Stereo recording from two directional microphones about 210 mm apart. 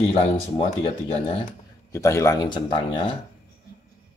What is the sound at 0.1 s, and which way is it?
Speech, 25° left (ahead or behind).